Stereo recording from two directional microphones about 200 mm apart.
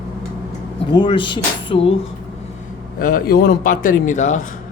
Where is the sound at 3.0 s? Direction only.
45° left (ahead or behind).